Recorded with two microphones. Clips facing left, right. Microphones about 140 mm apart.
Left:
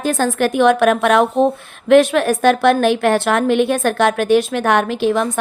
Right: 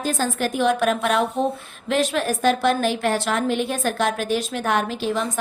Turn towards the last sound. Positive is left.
turn(degrees=65)  # may be behind; listen again after turning